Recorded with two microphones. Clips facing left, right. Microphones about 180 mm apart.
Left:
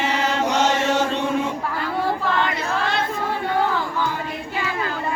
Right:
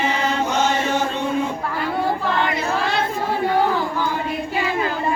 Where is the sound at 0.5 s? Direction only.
80° left.